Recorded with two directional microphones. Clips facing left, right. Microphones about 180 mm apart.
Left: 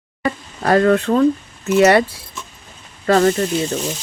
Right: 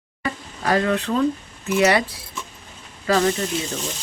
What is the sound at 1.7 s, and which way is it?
Speech, 50° left (ahead or behind).